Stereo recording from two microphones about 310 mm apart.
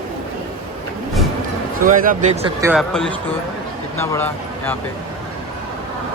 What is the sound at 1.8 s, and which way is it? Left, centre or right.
Speech, right.